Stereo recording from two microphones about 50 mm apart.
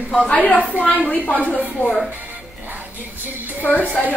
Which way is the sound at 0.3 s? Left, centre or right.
Left.